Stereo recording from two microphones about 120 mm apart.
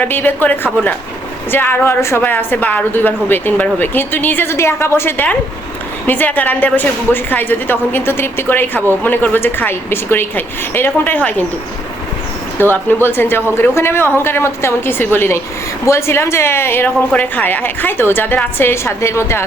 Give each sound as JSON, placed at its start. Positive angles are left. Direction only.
{"t": 0.1, "sound": "a woman's voice", "side_deg": 15}
{"t": 12.7, "sound": "a woman's voice", "side_deg": 15}